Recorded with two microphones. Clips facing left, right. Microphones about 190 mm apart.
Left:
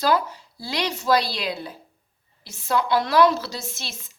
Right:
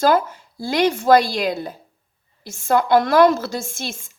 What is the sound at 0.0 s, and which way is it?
A woman's voice, 50° right (ahead or behind).